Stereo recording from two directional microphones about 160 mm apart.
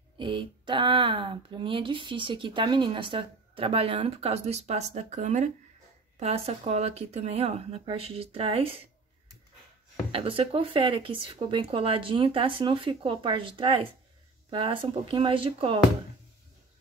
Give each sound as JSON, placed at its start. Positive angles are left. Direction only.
{"t": 0.2, "sound": "speech", "side_deg": -30}
{"t": 10.1, "sound": "speech", "side_deg": -35}